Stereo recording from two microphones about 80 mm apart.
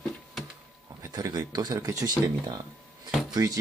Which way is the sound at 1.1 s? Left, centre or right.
Right.